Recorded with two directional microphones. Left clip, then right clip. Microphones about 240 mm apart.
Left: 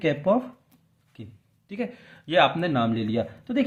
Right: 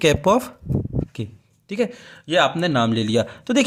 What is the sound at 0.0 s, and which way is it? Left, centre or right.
A man's voice, right.